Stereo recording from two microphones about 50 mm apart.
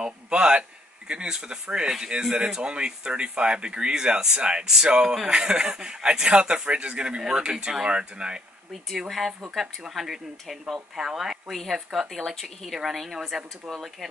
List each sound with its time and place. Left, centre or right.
0.0 s a man's voice: centre
9.5 s a man's voice: centre